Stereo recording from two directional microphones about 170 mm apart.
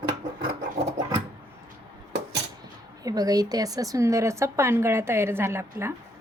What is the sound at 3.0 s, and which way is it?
Speech, 20° right (ahead or behind).